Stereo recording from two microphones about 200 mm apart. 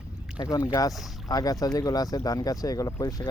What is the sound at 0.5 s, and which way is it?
Speech, 15° left (ahead or behind).